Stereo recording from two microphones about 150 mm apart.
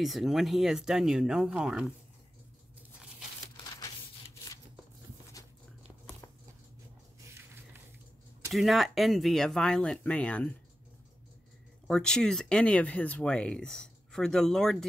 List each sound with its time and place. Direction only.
0.0 s speech: centre (ahead or behind)
3.5 s a sound: 25° left (ahead or behind)
8.5 s speech: centre (ahead or behind)
11.9 s speech: 5° left (ahead or behind)